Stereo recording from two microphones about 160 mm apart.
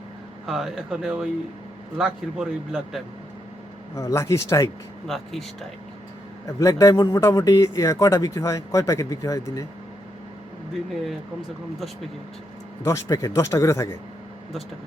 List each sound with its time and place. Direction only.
0.4 s speech: centre (ahead or behind)
3.9 s speech: 20° left (ahead or behind)
5.0 s speech: centre (ahead or behind)
6.6 s speech: 20° left (ahead or behind)
12.8 s speech: 20° left (ahead or behind)